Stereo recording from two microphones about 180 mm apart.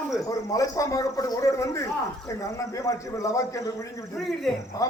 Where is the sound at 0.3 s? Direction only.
20° left (ahead or behind).